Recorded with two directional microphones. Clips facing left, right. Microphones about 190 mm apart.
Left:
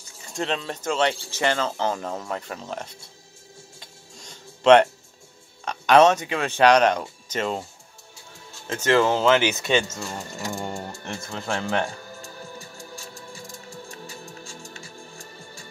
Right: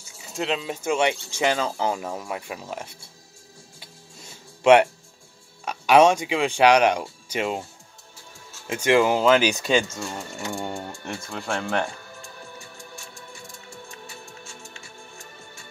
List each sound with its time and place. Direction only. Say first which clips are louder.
0.2 s speech: right 1 dB; 5° right (ahead or behind)
3.8 s music: even; 5° right (ahead or behind)
5.7 s speech: even; 10° right (ahead or behind)
8.6 s speech: right 1 dB; 15° right (ahead or behind)
9.4 s speech: right 1 dB; 20° left (ahead or behind)
10.5 s speech: right 1 dB; 5° left (ahead or behind)
12.5 s music: left 2 dB; 35° left (ahead or behind)